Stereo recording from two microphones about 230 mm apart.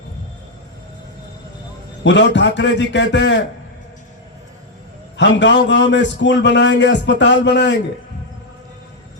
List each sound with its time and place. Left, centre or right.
2.0 s a man's voice: left
5.1 s a man's voice: left